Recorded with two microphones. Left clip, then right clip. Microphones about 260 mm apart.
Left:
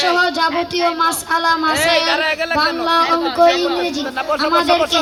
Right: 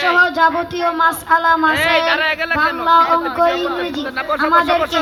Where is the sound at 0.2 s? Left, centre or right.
Left.